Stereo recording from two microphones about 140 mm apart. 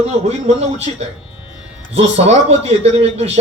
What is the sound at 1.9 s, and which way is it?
A man's voice, 45° right (ahead or behind).